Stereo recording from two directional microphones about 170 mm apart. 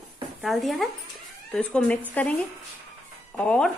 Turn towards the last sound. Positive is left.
turn(degrees=5)  # may be behind; listen again after turning